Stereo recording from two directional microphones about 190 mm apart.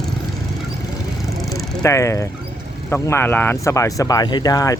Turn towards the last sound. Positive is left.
turn(degrees=20)  # may be behind; listen again after turning